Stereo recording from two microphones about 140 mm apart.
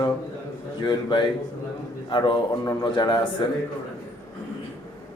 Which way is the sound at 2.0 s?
35° left (ahead or behind).